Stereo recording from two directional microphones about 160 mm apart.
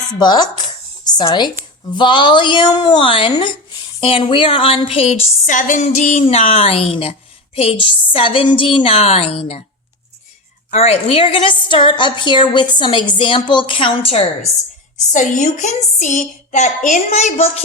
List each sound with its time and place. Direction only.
0.2 s a woman's voice: 25° left (ahead or behind)
10.7 s a woman's voice: 40° left (ahead or behind)
15.1 s speech: 50° left (ahead or behind)